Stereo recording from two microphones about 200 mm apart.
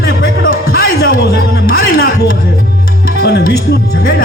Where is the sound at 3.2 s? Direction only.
50° left (ahead or behind).